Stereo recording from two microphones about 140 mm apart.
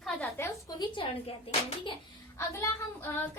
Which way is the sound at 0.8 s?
40° left (ahead or behind).